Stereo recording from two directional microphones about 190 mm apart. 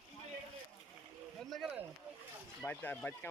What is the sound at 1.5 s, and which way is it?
Speech, centre (ahead or behind).